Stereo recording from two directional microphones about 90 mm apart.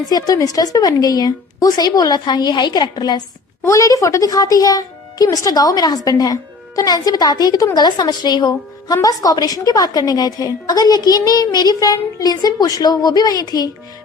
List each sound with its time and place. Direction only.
0.1 s speech: 45° left (ahead or behind)
3.6 s speech: 35° left (ahead or behind)